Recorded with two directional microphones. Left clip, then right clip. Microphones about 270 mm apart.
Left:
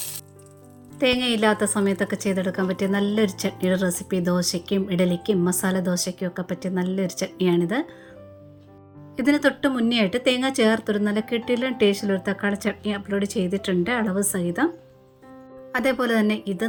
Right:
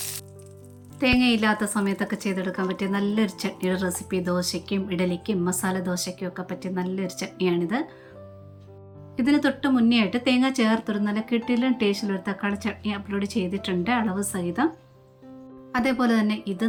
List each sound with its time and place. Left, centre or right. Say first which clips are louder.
0.9 s a woman's voice: left 1 dB; left
9.1 s a woman's voice: left 2 dB; centre
15.7 s a woman's voice: left 2 dB; centre